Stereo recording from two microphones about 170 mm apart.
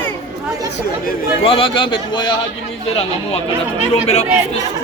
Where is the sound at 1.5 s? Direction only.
30° left (ahead or behind).